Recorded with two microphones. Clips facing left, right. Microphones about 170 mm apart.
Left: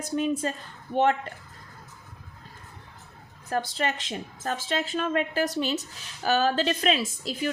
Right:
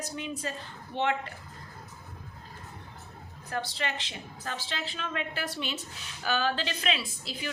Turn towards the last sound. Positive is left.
turn(degrees=45)  # may be behind; listen again after turning